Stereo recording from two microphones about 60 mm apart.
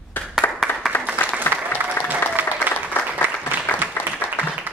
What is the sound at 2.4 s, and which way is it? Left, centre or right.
Applause, right.